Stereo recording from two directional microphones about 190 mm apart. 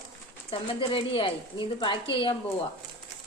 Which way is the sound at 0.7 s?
30° left (ahead or behind).